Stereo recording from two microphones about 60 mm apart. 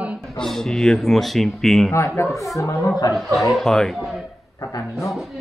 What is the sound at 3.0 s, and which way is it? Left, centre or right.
Speech, left.